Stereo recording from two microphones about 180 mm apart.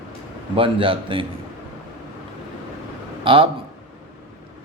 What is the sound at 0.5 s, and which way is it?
Speech, 30° right (ahead or behind).